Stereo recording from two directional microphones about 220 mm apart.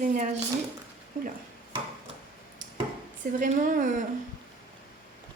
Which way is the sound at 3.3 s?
35° right (ahead or behind).